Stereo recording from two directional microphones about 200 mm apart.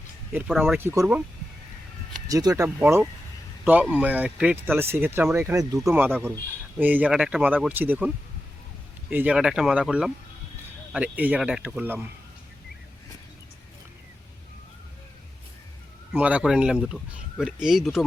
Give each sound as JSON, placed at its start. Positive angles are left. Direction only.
{"t": 0.3, "sound": "speech", "side_deg": -10}
{"t": 2.2, "sound": "speech", "side_deg": -15}
{"t": 16.1, "sound": "speech", "side_deg": -5}